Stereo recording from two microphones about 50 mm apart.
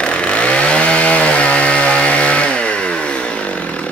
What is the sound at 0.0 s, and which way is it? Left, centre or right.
Chainsaw, left.